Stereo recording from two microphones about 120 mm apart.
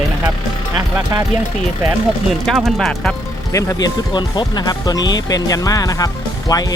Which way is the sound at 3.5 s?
35° left (ahead or behind).